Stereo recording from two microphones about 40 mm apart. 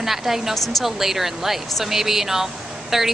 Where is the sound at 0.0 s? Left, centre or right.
Centre.